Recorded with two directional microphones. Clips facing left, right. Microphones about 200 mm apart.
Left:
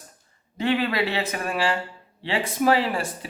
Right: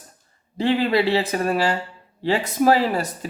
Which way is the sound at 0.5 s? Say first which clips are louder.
Right 4 dB; 30° right (ahead or behind).